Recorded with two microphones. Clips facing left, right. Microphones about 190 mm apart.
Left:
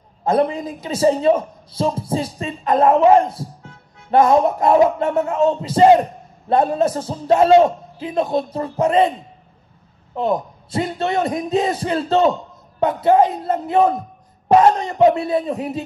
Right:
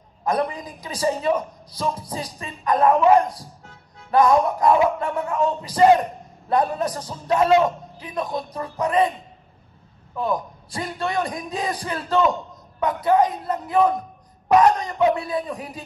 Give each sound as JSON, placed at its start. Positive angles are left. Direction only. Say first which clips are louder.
{"t": 0.2, "sound": "a man's voice", "louder": "left 6 dB", "side_deg": 25}
{"t": 10.1, "sound": "a man's voice", "louder": "left 4 dB", "side_deg": 25}